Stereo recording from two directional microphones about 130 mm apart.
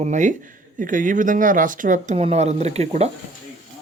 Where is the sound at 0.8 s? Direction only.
90° right.